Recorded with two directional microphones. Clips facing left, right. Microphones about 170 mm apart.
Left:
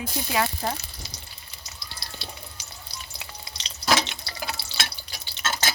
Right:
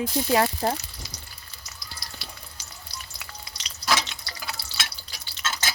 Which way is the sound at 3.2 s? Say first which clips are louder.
Left 1 dB; 25° left (ahead or behind).